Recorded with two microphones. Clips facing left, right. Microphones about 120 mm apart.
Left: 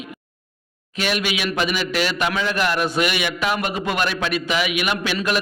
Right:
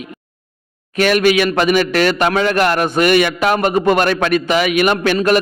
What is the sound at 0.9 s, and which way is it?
A man's voice, 50° right (ahead or behind).